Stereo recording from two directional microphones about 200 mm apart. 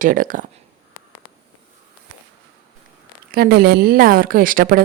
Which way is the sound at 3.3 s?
50° right (ahead or behind).